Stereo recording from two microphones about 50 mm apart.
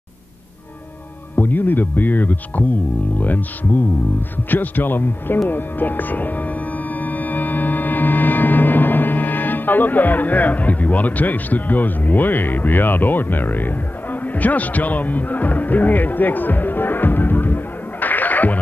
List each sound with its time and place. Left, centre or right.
1.3 s speech: left